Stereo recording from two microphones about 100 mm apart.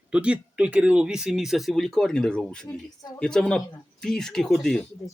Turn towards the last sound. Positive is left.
turn(degrees=0)  # may be behind; listen again after turning